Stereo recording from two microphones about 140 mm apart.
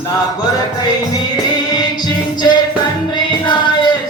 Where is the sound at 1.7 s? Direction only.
30° left (ahead or behind).